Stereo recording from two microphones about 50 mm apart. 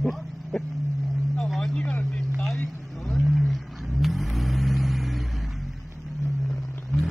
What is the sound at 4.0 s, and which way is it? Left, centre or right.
Vehicle, centre.